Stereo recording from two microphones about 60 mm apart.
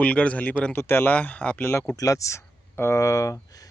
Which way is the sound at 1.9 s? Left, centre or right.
Left.